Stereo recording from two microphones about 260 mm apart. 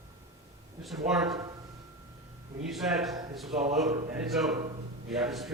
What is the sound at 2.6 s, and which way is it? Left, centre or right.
Speech, centre.